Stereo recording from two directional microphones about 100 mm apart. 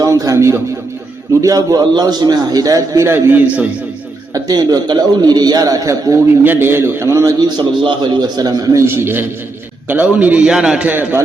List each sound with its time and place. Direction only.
0.0 s a man's voice: 35° right (ahead or behind)
3.4 s a man's voice: 15° right (ahead or behind)
4.4 s a man's voice: 40° right (ahead or behind)
6.4 s a man's voice: 20° right (ahead or behind)
7.4 s a man's voice: 50° right (ahead or behind); by 11.2 s 20° right (ahead or behind)